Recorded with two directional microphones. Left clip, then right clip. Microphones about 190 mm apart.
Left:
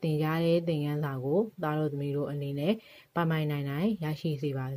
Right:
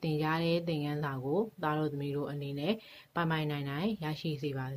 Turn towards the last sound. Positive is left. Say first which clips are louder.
# left 3 dB
turn(degrees=40)  # may be behind; listen again after turning